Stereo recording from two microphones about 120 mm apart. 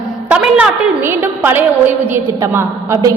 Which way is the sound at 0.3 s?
10° right (ahead or behind).